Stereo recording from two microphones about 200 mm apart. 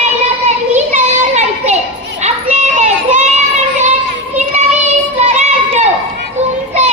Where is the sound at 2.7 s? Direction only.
35° right (ahead or behind).